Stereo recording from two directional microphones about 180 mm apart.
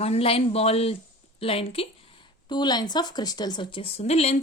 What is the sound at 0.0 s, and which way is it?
Speech, 35° left (ahead or behind).